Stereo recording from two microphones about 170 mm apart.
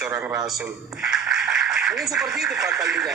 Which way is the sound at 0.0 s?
15° right (ahead or behind).